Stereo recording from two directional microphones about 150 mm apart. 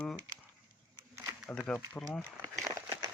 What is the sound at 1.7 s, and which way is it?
Speech, 10° left (ahead or behind).